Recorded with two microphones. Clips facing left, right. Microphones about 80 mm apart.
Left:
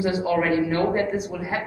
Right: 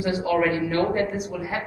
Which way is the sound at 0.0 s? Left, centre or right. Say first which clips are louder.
Even; left.